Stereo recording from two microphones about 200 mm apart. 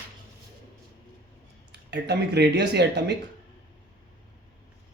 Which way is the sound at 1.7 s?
55° right (ahead or behind).